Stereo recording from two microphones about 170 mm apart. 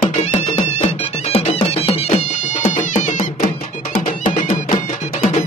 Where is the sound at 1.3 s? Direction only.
35° left (ahead or behind).